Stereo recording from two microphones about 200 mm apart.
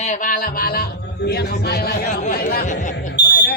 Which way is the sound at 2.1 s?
35° left (ahead or behind).